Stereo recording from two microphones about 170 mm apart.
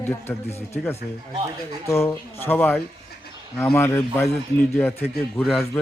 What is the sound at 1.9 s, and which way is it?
A man's voice, 15° left (ahead or behind).